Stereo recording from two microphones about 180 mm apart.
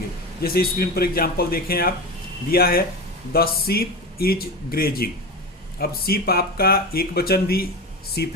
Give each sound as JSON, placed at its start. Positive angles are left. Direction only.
{"t": 0.4, "sound": "speech", "side_deg": 55}